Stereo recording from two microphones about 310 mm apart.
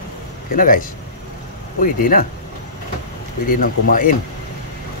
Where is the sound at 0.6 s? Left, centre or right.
Left.